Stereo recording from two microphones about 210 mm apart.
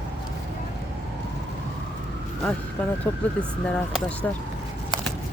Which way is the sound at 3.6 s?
5° left (ahead or behind).